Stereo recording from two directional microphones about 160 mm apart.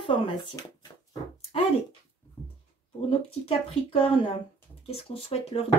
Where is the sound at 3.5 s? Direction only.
35° left (ahead or behind).